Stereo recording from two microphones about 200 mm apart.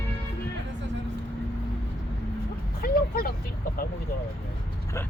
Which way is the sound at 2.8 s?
45° left (ahead or behind).